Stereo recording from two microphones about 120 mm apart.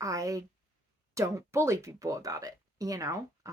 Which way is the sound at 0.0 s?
30° right (ahead or behind).